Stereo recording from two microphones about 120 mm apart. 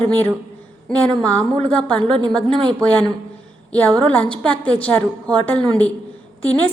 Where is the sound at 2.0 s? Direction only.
40° right (ahead or behind).